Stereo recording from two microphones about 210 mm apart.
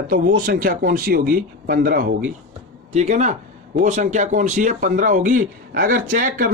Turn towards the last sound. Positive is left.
turn(degrees=-40)  # may be behind; listen again after turning